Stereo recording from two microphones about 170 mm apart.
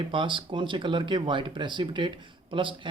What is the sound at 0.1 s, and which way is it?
Speech, 30° right (ahead or behind).